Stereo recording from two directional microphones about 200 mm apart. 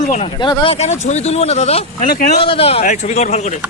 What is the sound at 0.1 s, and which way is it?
Speech, 25° left (ahead or behind).